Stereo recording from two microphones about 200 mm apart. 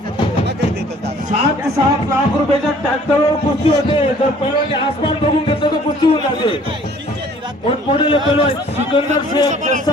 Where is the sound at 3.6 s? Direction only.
25° left (ahead or behind).